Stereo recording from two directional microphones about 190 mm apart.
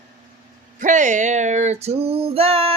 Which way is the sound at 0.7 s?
40° right (ahead or behind).